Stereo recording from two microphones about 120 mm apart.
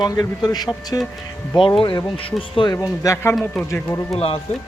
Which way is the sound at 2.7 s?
30° left (ahead or behind).